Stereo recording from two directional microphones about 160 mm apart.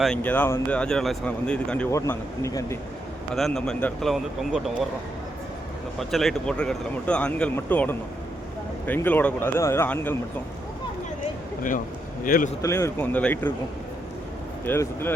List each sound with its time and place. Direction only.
0.0 s speech: 5° left (ahead or behind)
1.9 s speech: 20° left (ahead or behind)
3.3 s speech: centre (ahead or behind)
6.0 s speech: centre (ahead or behind)
12.2 s speech: 60° left (ahead or behind)
12.6 s speech: 15° left (ahead or behind)
14.6 s speech: 15° left (ahead or behind)